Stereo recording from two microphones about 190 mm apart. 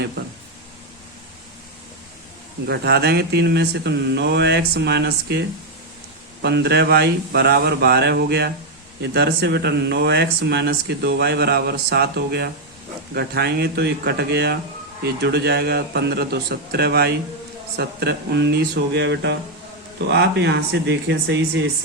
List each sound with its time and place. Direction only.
2.6 s speech: 60° right (ahead or behind)
6.4 s speech: 65° right (ahead or behind)